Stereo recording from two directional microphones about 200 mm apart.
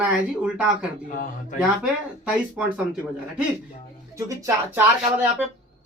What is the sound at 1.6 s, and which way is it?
Speech, 5° right (ahead or behind).